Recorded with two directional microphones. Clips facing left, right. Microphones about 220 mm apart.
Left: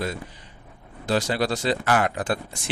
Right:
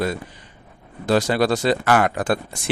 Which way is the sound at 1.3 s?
55° right (ahead or behind).